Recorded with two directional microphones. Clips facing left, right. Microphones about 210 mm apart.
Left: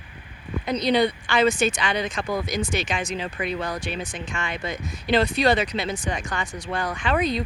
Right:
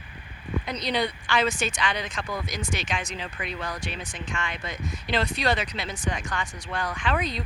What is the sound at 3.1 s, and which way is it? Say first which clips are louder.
Speech: left 6 dB; 40° left (ahead or behind).